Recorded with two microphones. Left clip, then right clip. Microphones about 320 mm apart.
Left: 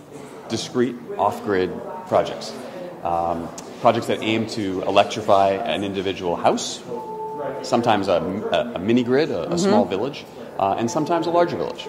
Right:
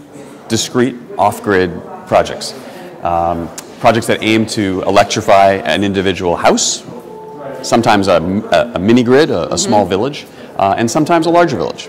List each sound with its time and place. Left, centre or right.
0.5 s speech: right